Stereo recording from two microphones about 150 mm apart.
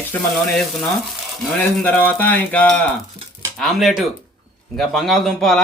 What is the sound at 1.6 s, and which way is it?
A man's voice, 10° left (ahead or behind).